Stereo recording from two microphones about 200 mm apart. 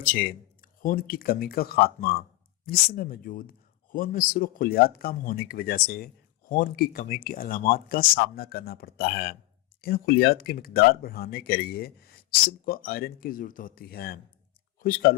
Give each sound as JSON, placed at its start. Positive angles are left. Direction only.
{"t": 0.0, "sound": "speech", "side_deg": 45}